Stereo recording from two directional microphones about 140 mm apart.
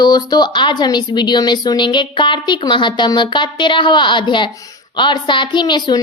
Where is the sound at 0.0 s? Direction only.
30° left (ahead or behind).